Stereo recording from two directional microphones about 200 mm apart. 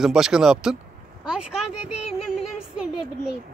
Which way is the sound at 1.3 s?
5° right (ahead or behind).